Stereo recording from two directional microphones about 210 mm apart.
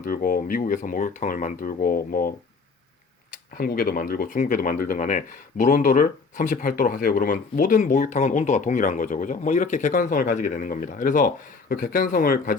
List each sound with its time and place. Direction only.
0.0 s speech: 45° left (ahead or behind)
3.6 s speech: 45° left (ahead or behind)